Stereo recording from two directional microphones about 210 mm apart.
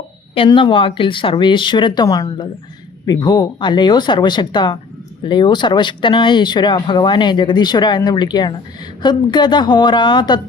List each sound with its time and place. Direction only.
0.3 s speech: 25° left (ahead or behind)